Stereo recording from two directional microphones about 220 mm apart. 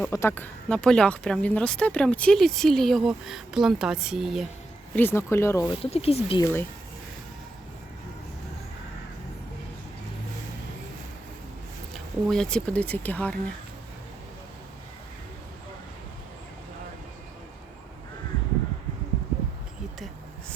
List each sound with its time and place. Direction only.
0.0 s speech: 10° left (ahead or behind)
4.9 s speech: 10° left (ahead or behind)
5.8 s speech: 25° left (ahead or behind)
6.4 s speech: 10° left (ahead or behind)
11.9 s speech: 5° left (ahead or behind)